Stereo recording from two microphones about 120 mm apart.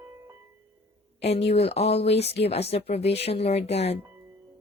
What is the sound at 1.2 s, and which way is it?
Speech, 60° left (ahead or behind).